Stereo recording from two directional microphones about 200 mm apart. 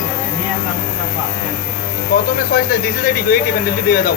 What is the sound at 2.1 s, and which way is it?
Speech, 50° left (ahead or behind).